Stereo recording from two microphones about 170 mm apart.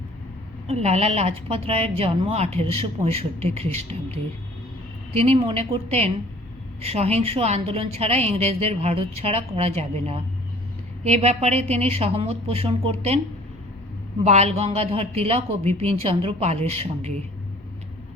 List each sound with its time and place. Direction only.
0.7 s a woman's voice: 40° right (ahead or behind)
5.2 s a woman's voice: 35° right (ahead or behind)
14.3 s a woman's voice: 40° right (ahead or behind)